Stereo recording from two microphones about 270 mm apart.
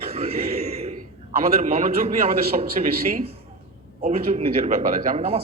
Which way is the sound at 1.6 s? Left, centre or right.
Right.